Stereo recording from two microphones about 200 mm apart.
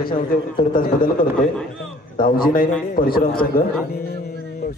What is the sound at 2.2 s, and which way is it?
A man's voice, 45° left (ahead or behind).